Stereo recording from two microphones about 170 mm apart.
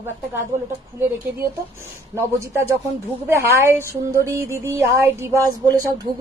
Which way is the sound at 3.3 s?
15° right (ahead or behind).